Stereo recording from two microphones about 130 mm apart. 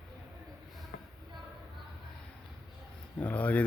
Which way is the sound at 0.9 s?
90° left.